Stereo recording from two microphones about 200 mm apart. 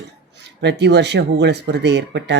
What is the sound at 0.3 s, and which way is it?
Speech, 60° right (ahead or behind).